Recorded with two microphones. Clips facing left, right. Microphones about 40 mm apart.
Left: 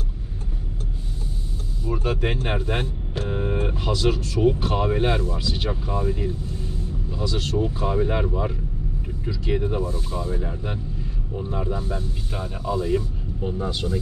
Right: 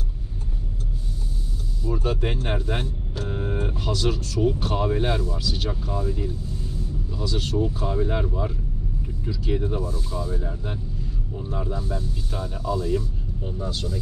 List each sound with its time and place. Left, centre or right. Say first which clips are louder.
1.9 s a sound: even; centre
2.2 s speech: left 2 dB; centre
7.1 s vehicle: left 3 dB; centre
7.5 s speech: left 2 dB; left